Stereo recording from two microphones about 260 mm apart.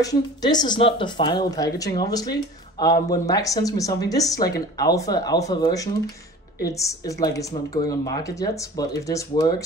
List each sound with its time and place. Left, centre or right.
0.0 s speech: centre